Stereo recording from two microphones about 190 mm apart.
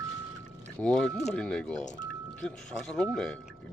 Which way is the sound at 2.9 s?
5° left (ahead or behind).